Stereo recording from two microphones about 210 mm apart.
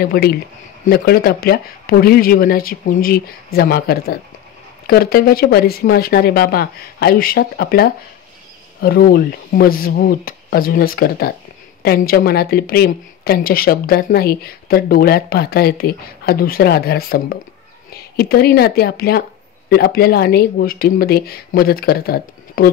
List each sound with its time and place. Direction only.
0.0 s speech: 45° left (ahead or behind)